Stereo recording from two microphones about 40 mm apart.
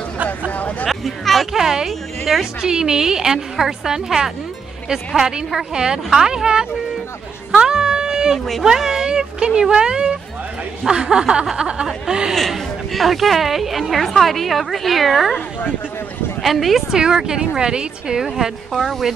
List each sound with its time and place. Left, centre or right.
0.5 s hubbub: left
0.8 s speech: centre
1.5 s a woman's voice: centre
1.9 s a woman's voice: centre
2.6 s a woman's voice: centre
7.5 s a sound: centre
8.7 s a woman's voice: centre
12.4 s a woman's voice: centre
16.4 s a woman's voice: centre
16.9 s a woman's voice: centre
18.2 s a woman's voice: centre